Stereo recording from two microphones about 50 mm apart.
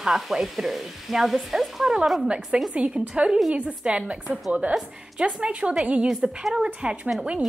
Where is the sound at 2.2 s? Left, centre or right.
Centre.